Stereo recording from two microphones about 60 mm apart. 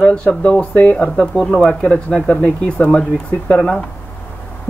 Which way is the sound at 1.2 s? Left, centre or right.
Centre.